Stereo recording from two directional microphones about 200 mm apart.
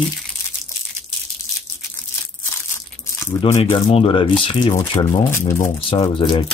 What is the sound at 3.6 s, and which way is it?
Speech, 30° left (ahead or behind).